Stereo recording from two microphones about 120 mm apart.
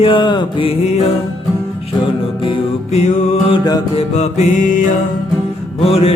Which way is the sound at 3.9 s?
70° left (ahead or behind).